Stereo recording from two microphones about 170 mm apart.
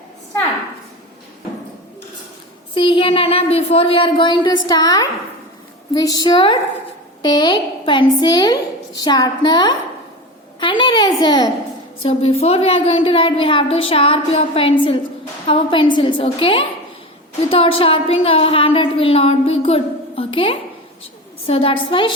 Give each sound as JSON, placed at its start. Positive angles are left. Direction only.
{"t": 2.7, "sound": "a woman's voice", "side_deg": 30}
{"t": 12.0, "sound": "a woman's voice", "side_deg": 35}